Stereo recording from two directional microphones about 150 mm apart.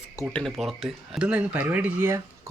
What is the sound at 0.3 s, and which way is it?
Speech, centre (ahead or behind).